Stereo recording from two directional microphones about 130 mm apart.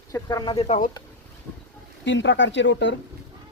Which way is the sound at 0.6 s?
60° left (ahead or behind).